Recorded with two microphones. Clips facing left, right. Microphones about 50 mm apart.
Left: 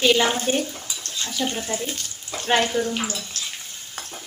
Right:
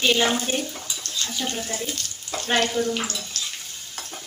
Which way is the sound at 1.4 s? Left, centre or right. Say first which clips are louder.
Left 5 dB; centre.